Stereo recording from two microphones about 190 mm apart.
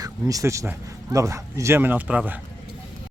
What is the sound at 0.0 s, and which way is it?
Speech, 20° right (ahead or behind).